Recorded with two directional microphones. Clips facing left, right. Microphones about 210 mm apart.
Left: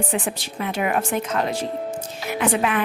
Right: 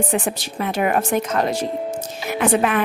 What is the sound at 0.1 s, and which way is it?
Speech, 45° right (ahead or behind).